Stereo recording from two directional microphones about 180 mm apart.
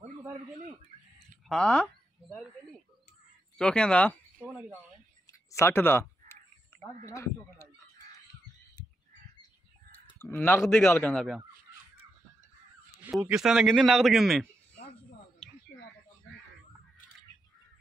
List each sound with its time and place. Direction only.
1.5 s speech: 5° left (ahead or behind)
3.5 s speech: 5° left (ahead or behind)
5.5 s speech: 15° left (ahead or behind)
10.1 s a man's voice: 10° left (ahead or behind)
13.0 s a man's voice: 5° right (ahead or behind)